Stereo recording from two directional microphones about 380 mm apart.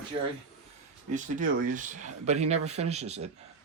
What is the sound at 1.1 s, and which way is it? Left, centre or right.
Speech, right.